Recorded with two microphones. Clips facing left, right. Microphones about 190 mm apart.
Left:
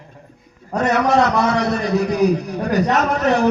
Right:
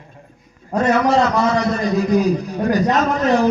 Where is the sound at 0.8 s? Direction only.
70° left (ahead or behind).